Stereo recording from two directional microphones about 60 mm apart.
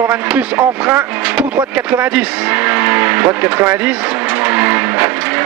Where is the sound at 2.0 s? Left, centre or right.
Right.